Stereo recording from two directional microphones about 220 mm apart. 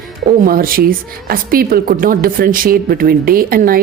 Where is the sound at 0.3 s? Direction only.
40° right (ahead or behind).